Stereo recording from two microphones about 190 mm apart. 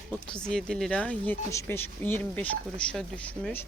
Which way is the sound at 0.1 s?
5° left (ahead or behind).